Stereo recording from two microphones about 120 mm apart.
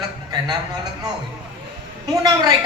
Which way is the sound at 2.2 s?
35° right (ahead or behind).